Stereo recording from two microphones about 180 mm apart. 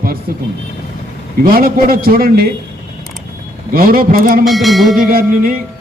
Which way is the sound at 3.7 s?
55° right (ahead or behind).